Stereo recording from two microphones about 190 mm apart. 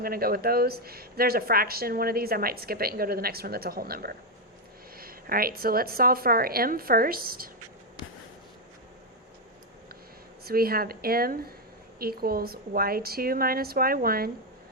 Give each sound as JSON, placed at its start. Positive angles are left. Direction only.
{"t": 0.0, "sound": "speech", "side_deg": -50}
{"t": 10.4, "sound": "speech", "side_deg": -50}